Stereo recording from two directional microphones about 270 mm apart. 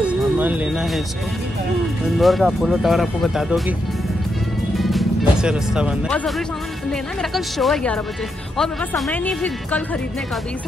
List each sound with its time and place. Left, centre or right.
0.0 s music: centre
2.1 s speech: centre
4.7 s speech: centre